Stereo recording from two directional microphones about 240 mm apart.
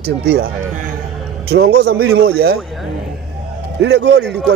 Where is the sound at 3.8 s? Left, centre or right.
Right.